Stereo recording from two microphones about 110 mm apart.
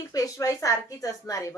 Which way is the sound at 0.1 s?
30° left (ahead or behind).